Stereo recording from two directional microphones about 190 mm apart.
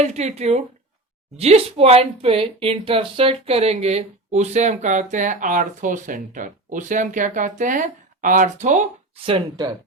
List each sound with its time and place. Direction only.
0.0 s speech: 35° right (ahead or behind)